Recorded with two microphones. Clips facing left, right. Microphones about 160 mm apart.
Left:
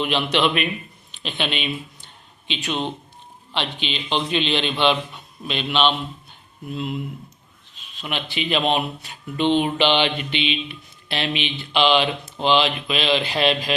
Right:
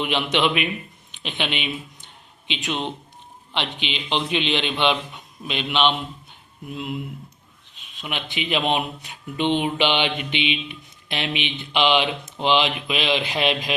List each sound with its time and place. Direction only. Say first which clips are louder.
0.0 s mantra: left 1 dB; 15° right (ahead or behind)
1.1 s speech: left 1 dB; 15° right (ahead or behind)
2.5 s mantra: left 1 dB; 15° right (ahead or behind)